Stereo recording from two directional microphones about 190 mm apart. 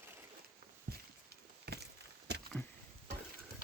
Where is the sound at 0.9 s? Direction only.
55° right (ahead or behind).